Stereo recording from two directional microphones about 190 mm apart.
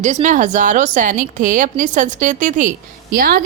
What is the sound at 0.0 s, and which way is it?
A woman's voice, 40° right (ahead or behind).